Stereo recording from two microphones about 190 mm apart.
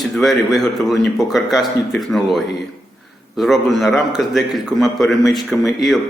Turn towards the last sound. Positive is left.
turn(degrees=0)  # may be behind; listen again after turning